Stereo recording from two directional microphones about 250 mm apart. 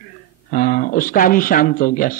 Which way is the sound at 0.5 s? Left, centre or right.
Left.